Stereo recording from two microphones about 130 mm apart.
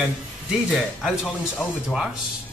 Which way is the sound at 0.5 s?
Centre (ahead or behind).